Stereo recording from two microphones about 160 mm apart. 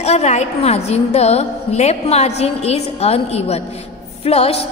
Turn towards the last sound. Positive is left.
turn(degrees=40)  # may be behind; listen again after turning